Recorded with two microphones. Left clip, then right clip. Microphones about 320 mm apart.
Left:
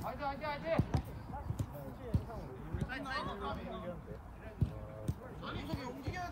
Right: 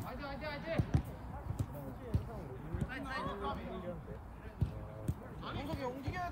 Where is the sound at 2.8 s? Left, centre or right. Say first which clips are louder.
Left 2 dB; centre.